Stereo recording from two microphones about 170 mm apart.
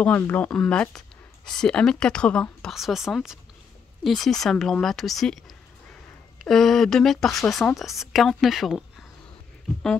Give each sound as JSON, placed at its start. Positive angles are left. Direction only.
{"t": 0.0, "sound": "speech", "side_deg": 10}
{"t": 6.4, "sound": "speech", "side_deg": 0}